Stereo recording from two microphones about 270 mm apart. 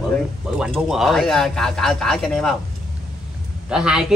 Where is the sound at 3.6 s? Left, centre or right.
Centre.